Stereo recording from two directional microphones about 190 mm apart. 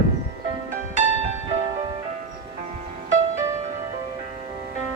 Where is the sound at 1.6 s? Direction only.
30° right (ahead or behind).